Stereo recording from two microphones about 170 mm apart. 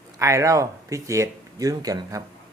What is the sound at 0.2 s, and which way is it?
Speech, 15° right (ahead or behind).